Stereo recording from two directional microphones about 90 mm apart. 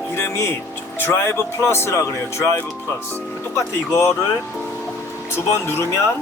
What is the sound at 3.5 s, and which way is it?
Speech, 35° left (ahead or behind).